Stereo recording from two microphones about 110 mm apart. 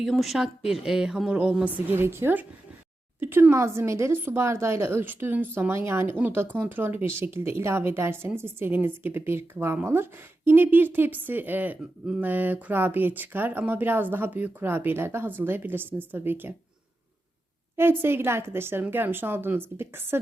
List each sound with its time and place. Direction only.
0.0 s a woman's voice: centre (ahead or behind); by 16.6 s 20° right (ahead or behind)
17.7 s a woman's voice: 20° right (ahead or behind)